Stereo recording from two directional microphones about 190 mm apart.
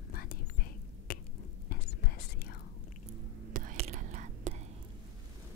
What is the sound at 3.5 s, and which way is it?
Whispering, 45° right (ahead or behind).